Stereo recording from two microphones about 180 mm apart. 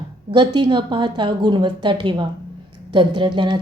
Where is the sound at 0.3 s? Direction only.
25° right (ahead or behind).